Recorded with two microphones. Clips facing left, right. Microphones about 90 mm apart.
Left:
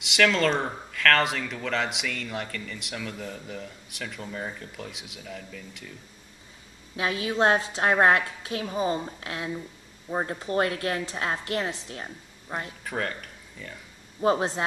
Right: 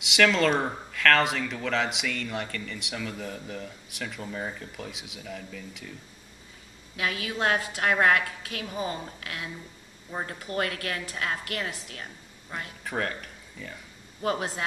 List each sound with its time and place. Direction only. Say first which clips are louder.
0.0 s speech: even; centre (ahead or behind)
7.0 s a woman's voice: left 5 dB; 25° left (ahead or behind)
12.8 s speech: right 4 dB; centre (ahead or behind)
14.2 s a woman's voice: left 5 dB; 25° left (ahead or behind)